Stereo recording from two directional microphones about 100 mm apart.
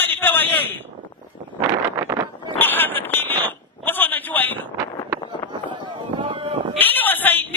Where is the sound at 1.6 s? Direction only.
30° right (ahead or behind).